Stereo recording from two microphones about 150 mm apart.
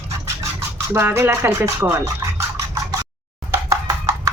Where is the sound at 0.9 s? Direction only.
15° right (ahead or behind).